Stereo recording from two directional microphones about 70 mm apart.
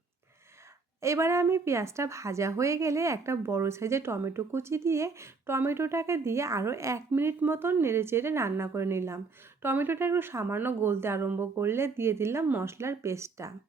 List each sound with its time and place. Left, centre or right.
1.0 s a woman's voice: right
7.1 s a woman's voice: right
12.5 s speech: right
12.7 s speech: right